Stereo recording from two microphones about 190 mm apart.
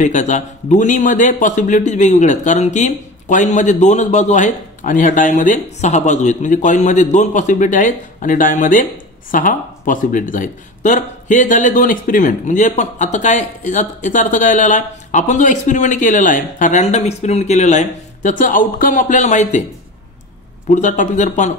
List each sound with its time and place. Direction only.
0.0 s speech: 40° left (ahead or behind)
20.7 s speech: 40° left (ahead or behind)